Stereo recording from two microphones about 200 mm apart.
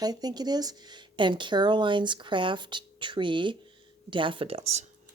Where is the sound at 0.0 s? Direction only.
20° right (ahead or behind).